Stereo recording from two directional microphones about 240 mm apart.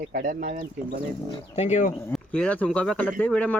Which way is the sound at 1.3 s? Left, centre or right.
Left.